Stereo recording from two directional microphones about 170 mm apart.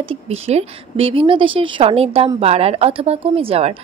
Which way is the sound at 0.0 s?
35° right (ahead or behind).